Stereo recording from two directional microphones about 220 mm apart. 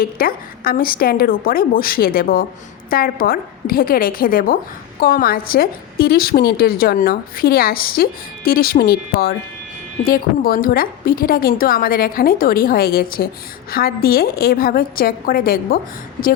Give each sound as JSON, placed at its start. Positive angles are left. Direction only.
{"t": 0.0, "sound": "a woman's voice", "side_deg": 40}